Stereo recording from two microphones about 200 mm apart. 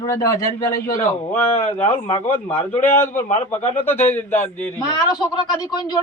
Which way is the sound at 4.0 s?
10° left (ahead or behind).